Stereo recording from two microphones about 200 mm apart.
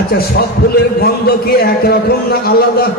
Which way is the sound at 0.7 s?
50° left (ahead or behind).